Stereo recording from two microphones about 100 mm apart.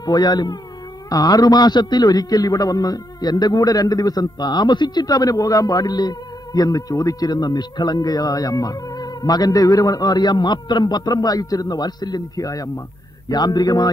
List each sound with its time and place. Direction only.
0.0 s a man's voice: 45° left (ahead or behind)